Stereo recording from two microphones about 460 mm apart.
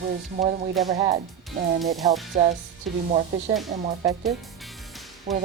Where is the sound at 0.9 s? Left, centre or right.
Centre.